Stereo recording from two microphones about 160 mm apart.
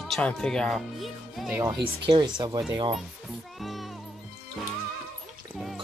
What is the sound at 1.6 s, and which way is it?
Speech, 30° right (ahead or behind).